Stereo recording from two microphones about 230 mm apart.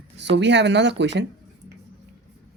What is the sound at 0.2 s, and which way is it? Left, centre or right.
Speech, right.